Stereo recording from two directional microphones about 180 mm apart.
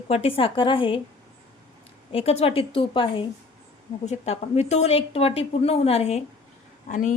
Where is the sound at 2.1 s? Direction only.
30° left (ahead or behind).